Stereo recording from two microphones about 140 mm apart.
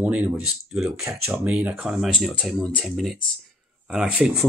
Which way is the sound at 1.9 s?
5° right (ahead or behind).